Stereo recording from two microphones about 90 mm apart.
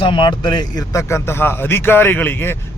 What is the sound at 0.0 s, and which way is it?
Speech, 65° left (ahead or behind).